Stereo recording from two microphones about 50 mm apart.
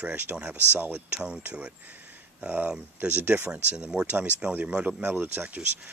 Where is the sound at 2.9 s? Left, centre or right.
Right.